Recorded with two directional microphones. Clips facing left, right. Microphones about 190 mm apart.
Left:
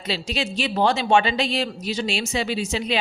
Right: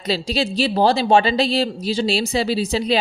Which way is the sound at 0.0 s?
35° right (ahead or behind).